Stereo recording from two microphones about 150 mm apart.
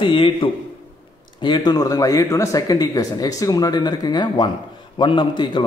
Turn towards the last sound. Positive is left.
turn(degrees=30)  # may be behind; listen again after turning